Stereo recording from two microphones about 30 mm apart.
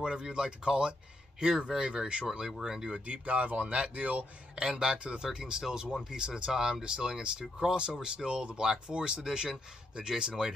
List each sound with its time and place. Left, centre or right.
0.0 s speech: right
3.1 s speech: right
4.6 s speech: right